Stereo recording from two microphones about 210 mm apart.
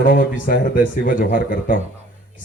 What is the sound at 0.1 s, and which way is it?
A man's voice, 40° left (ahead or behind).